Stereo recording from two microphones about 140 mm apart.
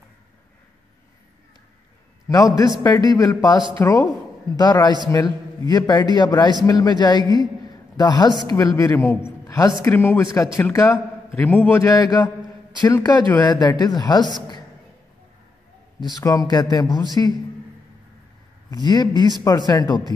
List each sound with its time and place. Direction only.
2.2 s a man's voice: 25° left (ahead or behind)
16.2 s a man's voice: 25° left (ahead or behind)
18.7 s a man's voice: 30° left (ahead or behind)